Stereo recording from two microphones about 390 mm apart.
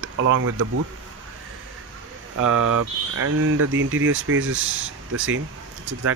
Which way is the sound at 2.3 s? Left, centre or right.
Right.